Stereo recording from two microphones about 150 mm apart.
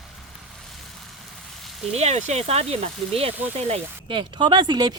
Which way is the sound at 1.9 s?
45° right (ahead or behind).